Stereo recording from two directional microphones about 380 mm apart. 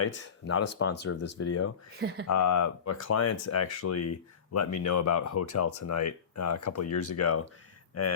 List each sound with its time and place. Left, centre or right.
0.0 s speech: left
2.0 s speech: right
2.2 s speech: left
7.3 s speech: left